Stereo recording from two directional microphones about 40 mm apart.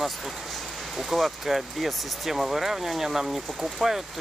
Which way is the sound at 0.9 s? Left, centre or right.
Centre.